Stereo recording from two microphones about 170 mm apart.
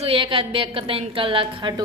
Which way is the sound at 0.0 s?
30° right (ahead or behind).